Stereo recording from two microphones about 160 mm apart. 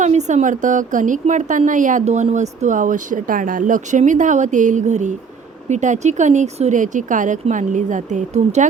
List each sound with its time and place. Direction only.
0.0 s a woman's voice: 45° right (ahead or behind)